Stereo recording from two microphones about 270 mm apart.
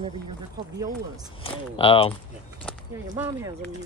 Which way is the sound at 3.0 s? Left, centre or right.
Centre.